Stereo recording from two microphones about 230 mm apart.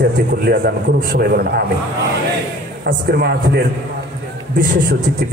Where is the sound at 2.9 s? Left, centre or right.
Right.